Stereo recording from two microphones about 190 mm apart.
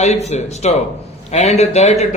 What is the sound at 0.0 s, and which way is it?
Speech, 35° left (ahead or behind).